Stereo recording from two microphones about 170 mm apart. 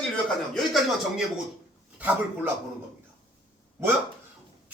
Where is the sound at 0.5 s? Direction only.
Centre (ahead or behind).